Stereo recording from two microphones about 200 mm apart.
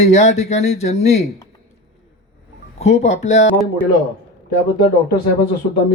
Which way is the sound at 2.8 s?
35° left (ahead or behind).